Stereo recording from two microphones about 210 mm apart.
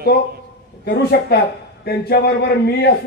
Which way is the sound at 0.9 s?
50° left (ahead or behind).